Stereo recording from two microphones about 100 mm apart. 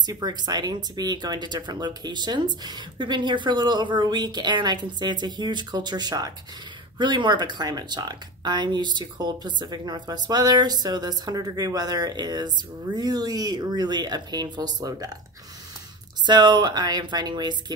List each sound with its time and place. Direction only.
0.0 s speech: 40° right (ahead or behind)
16.3 s speech: 50° right (ahead or behind)